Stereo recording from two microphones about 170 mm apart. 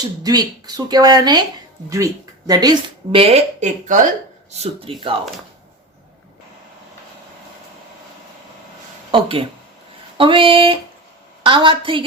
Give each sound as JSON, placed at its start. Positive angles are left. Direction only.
{"t": 0.2, "sound": "speech", "side_deg": -20}
{"t": 2.5, "sound": "speech", "side_deg": -25}
{"t": 4.5, "sound": "speech", "side_deg": -35}
{"t": 9.1, "sound": "speech", "side_deg": -30}